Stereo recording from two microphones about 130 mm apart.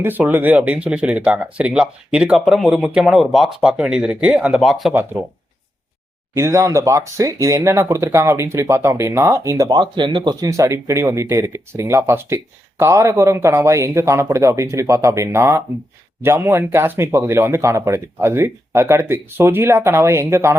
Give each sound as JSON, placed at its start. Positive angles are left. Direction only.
{"t": 0.0, "sound": "speech", "side_deg": -15}
{"t": 6.3, "sound": "speech", "side_deg": -20}
{"t": 10.5, "sound": "speech", "side_deg": -25}